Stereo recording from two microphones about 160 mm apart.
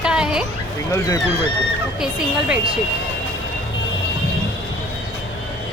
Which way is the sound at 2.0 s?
10° right (ahead or behind).